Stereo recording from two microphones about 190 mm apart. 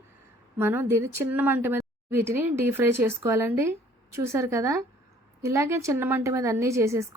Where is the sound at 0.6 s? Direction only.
10° right (ahead or behind).